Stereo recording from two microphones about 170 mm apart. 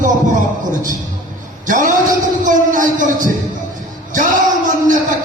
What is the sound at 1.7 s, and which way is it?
Speech, 50° right (ahead or behind).